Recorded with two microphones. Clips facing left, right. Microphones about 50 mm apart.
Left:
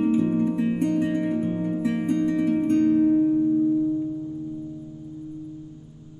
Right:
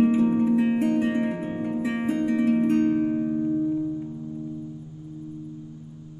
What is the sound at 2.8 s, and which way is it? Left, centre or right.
Music, right.